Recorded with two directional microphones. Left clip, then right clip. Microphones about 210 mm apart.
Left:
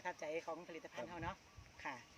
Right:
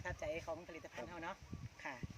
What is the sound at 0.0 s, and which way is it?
Speech, centre (ahead or behind).